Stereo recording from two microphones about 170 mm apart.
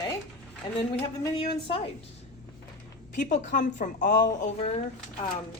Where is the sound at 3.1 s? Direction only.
50° left (ahead or behind).